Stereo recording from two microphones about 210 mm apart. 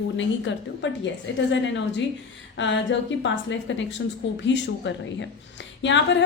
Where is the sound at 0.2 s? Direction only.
60° left (ahead or behind).